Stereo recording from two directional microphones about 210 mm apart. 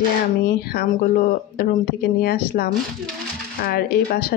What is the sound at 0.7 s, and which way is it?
A woman's voice, 45° left (ahead or behind).